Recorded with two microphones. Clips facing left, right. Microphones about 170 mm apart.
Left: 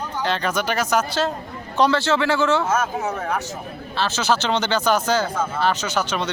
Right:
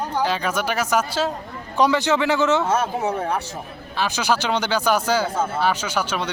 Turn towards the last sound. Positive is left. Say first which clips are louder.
# left 1 dB
turn(degrees=-10)  # may be behind; listen again after turning